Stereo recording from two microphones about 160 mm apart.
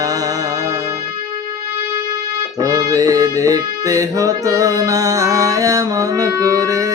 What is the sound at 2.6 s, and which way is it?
Music, 20° right (ahead or behind).